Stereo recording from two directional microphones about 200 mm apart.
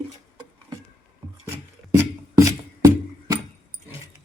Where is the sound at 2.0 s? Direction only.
15° right (ahead or behind).